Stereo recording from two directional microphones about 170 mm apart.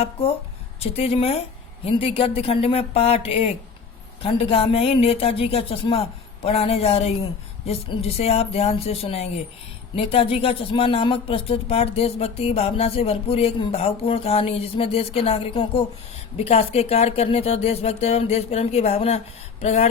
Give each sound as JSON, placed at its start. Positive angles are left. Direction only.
{"t": 0.0, "sound": "speech", "side_deg": 35}